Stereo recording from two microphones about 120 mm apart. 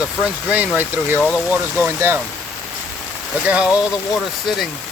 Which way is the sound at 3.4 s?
10° right (ahead or behind).